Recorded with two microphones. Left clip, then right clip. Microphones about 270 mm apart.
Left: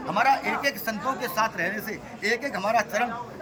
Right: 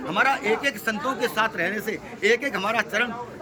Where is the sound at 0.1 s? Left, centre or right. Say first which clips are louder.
Right 1 dB; right.